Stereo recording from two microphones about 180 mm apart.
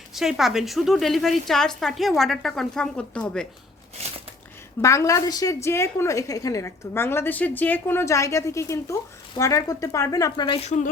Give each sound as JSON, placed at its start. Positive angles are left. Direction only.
{"t": 0.1, "sound": "a woman's voice", "side_deg": 0}
{"t": 4.8, "sound": "a woman's voice", "side_deg": 15}